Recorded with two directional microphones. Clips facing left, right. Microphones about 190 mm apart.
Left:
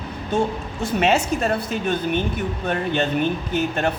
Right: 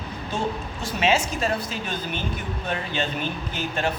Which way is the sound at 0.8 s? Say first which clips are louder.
Left 4 dB; 60° left (ahead or behind).